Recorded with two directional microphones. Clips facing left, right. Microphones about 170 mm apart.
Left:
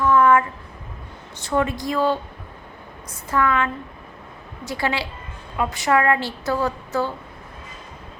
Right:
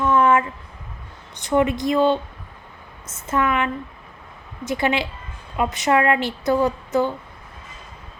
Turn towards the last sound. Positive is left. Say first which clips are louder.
# right 3 dB
turn(degrees=-20)  # may be behind; listen again after turning